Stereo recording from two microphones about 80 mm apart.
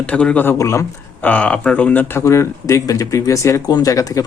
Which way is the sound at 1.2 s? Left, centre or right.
Centre.